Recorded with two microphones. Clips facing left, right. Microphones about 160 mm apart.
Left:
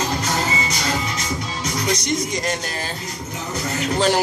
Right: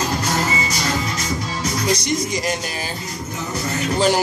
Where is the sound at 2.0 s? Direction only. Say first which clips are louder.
Right 1 dB; 5° right (ahead or behind).